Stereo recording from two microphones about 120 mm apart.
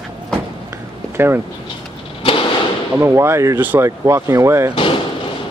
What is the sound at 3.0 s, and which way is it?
Speech, 20° right (ahead or behind).